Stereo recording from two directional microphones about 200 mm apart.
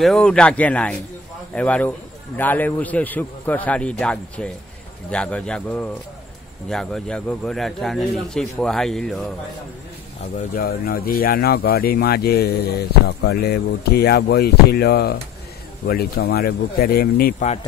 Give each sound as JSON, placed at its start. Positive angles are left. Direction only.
{"t": 0.0, "sound": "a man's voice", "side_deg": 5}
{"t": 10.3, "sound": "speech", "side_deg": 45}